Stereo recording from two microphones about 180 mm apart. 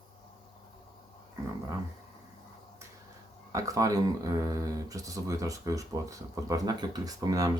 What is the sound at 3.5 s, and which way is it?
Speech, 20° right (ahead or behind).